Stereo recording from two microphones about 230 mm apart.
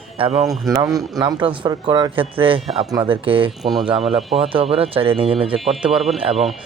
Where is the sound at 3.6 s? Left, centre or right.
Centre.